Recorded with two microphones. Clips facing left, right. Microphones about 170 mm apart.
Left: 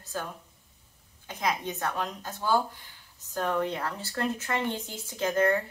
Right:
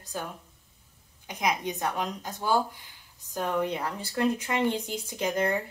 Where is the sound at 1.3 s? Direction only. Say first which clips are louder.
Right 2 dB; 15° right (ahead or behind).